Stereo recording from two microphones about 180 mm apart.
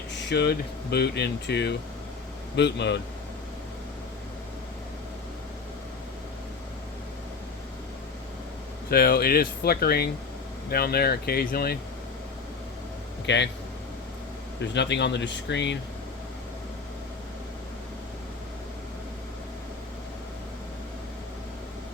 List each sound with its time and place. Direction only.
0.3 s speech: 65° left (ahead or behind)
8.9 s speech: 60° left (ahead or behind)
13.2 s speech: 75° left (ahead or behind)
14.7 s speech: 75° left (ahead or behind)